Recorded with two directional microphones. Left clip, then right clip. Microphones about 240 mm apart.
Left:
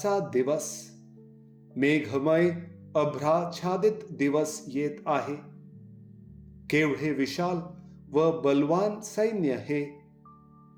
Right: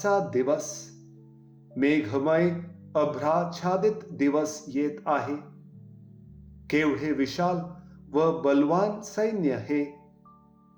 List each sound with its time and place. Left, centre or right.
0.0 s a man's voice: left
1.7 s a man's voice: left
6.7 s a man's voice: left